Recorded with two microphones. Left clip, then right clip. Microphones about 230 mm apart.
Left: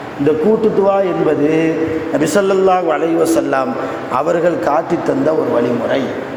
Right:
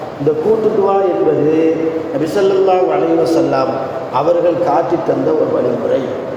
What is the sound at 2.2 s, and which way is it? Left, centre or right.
Speech, left.